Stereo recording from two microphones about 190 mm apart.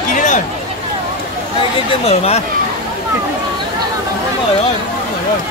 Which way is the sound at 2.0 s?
35° left (ahead or behind).